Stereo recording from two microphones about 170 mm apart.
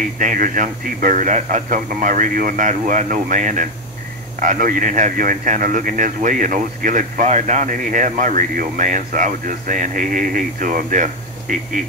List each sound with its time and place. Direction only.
0.2 s speech: 50° right (ahead or behind)